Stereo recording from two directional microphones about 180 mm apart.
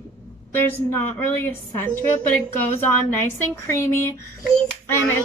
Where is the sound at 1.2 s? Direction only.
10° left (ahead or behind).